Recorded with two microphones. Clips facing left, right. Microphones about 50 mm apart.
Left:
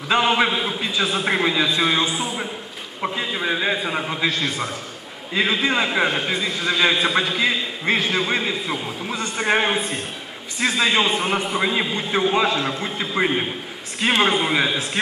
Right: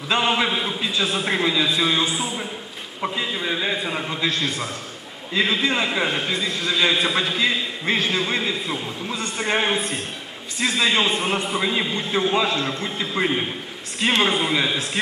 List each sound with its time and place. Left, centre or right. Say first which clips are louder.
0.1 s a man's voice: left 2 dB; centre